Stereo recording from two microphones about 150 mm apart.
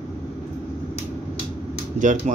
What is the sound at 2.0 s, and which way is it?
Speech, 60° right (ahead or behind).